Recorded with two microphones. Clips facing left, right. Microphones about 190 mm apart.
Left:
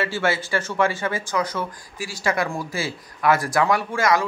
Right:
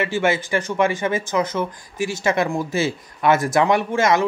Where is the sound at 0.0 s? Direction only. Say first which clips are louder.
Right 3 dB; 20° right (ahead or behind).